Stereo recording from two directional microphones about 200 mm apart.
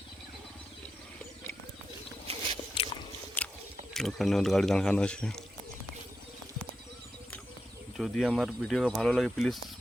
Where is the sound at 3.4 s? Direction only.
10° left (ahead or behind).